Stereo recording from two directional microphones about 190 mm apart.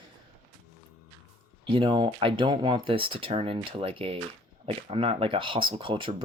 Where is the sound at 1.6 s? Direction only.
25° right (ahead or behind).